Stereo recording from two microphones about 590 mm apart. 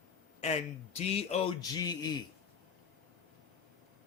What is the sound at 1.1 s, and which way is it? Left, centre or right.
Speech, centre.